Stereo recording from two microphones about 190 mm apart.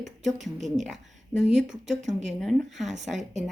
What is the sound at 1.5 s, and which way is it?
A woman's voice, centre (ahead or behind).